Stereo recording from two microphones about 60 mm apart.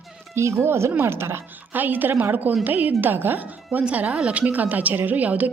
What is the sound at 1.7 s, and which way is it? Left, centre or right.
A woman's voice, right.